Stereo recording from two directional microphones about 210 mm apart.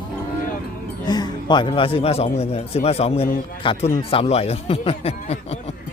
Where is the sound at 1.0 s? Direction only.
20° left (ahead or behind).